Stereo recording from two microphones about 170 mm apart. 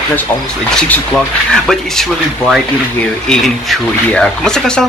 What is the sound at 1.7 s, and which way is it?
Speech, centre (ahead or behind).